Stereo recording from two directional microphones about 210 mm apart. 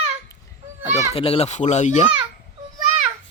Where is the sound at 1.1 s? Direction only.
25° left (ahead or behind).